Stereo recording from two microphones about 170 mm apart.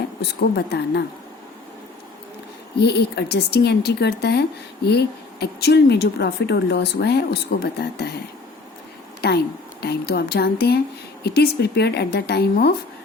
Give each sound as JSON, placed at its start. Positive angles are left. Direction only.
{"t": 0.2, "sound": "speech", "side_deg": 75}
{"t": 2.8, "sound": "speech", "side_deg": 75}
{"t": 9.2, "sound": "speech", "side_deg": 70}